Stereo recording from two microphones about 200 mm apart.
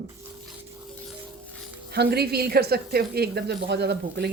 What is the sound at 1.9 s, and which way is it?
Speech, 55° right (ahead or behind).